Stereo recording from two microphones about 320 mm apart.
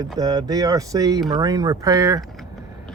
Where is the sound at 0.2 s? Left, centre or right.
Centre.